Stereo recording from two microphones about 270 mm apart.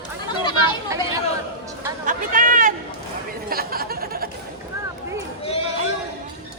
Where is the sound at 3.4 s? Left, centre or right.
Right.